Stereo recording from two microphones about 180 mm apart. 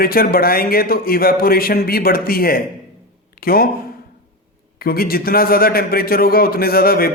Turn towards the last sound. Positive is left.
turn(degrees=55)  # may be behind; listen again after turning